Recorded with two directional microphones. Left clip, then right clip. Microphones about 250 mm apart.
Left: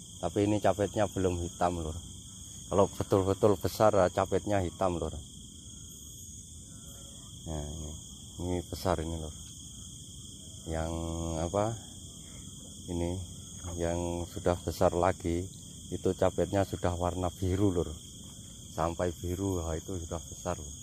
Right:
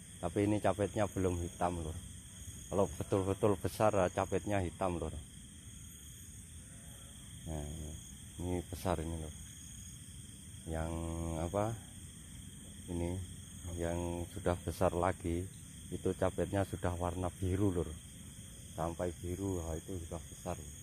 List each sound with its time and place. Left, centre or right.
0.2 s speech: centre
2.7 s speech: centre
8.4 s speech: centre
10.7 s speech: centre
12.8 s speech: centre
18.8 s speech: left